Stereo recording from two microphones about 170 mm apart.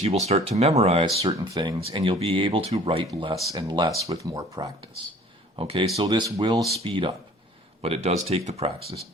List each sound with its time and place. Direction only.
0.0 s speech: 40° right (ahead or behind)
1.2 s speech: 20° right (ahead or behind)
5.5 s speech: 35° right (ahead or behind)